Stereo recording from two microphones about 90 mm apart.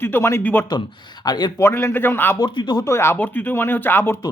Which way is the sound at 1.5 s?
30° left (ahead or behind).